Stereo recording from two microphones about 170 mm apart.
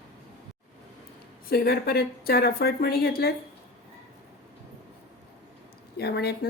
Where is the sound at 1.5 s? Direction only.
65° left (ahead or behind).